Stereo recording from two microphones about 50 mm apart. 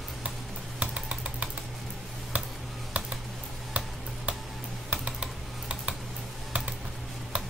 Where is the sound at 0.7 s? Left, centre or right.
Right.